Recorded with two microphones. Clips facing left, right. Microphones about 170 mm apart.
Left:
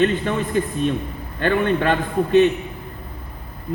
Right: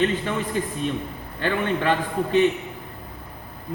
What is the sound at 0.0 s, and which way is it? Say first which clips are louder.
A man's voice: left 4 dB; 55° left (ahead or behind).